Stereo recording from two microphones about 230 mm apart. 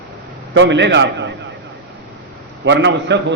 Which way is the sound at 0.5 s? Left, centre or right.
Right.